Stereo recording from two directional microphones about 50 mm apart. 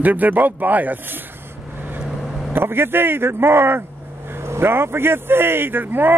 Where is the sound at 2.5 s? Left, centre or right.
Right.